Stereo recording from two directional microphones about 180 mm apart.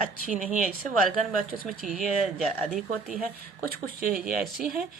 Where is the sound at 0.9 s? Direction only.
50° right (ahead or behind).